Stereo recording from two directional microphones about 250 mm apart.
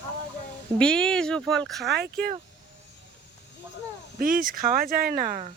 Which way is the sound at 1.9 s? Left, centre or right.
Right.